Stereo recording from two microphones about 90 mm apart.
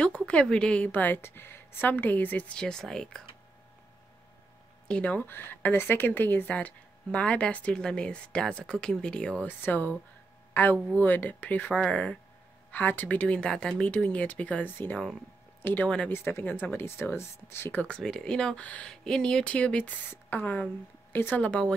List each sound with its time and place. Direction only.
0.3 s a woman's voice: 10° left (ahead or behind)
4.8 s a woman's voice: 15° left (ahead or behind)
9.5 s a woman's voice: 20° left (ahead or behind)
17.9 s a woman's voice: 5° left (ahead or behind); by 21.5 s 20° left (ahead or behind)
21.5 s a woman's voice: 10° left (ahead or behind)